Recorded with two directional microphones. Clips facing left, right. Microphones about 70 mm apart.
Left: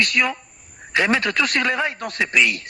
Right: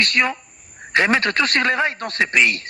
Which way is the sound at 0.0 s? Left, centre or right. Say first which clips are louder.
Right 1 dB; right.